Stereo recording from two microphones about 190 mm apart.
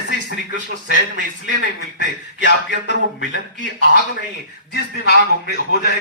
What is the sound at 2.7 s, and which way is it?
Speech, 65° left (ahead or behind).